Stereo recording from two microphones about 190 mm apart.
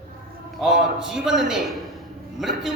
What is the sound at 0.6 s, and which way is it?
A man's voice, 5° right (ahead or behind).